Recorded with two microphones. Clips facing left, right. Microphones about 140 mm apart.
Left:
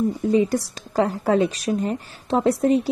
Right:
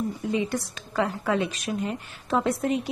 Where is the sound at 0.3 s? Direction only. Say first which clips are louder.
Left 8 dB; 40° left (ahead or behind).